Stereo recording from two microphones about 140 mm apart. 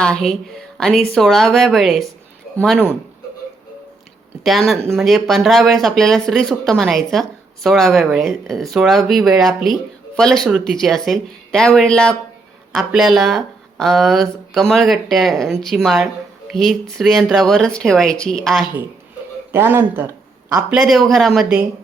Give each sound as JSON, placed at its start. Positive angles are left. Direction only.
{"t": 0.0, "sound": "speech", "side_deg": 5}
{"t": 4.4, "sound": "speech", "side_deg": 0}
{"t": 19.5, "sound": "speech", "side_deg": -15}